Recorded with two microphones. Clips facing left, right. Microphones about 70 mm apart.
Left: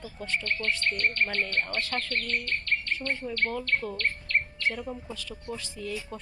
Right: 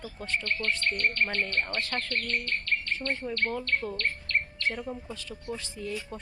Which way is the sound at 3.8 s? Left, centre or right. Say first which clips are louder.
Even; centre.